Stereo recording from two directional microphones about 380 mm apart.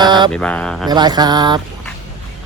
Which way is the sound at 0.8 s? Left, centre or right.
Centre.